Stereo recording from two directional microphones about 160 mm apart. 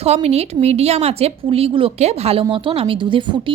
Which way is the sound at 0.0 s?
40° right (ahead or behind).